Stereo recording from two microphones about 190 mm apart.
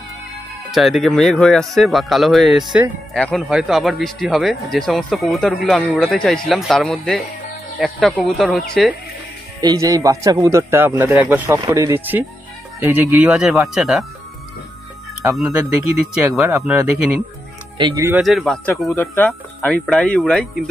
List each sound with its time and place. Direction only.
0.7 s speech: centre (ahead or behind)
9.6 s a man's voice: 20° right (ahead or behind); by 14.0 s centre (ahead or behind)
15.3 s a man's voice: centre (ahead or behind)
17.7 s a man's voice: 20° right (ahead or behind)
18.2 s speech: centre (ahead or behind)